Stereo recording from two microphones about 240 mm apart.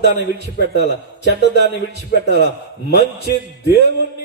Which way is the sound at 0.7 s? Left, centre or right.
Left.